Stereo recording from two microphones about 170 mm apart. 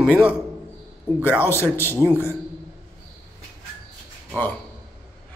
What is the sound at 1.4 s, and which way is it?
Speech, 15° left (ahead or behind).